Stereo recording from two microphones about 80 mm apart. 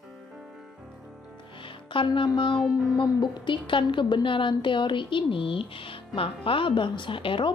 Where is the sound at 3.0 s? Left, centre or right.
Left.